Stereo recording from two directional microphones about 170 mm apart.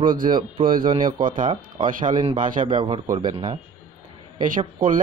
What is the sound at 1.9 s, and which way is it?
Speech, 50° right (ahead or behind).